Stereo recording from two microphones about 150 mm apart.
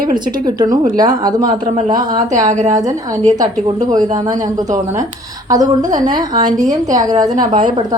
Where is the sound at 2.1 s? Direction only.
55° right (ahead or behind).